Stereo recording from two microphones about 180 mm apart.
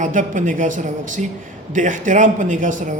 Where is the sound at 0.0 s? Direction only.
45° right (ahead or behind).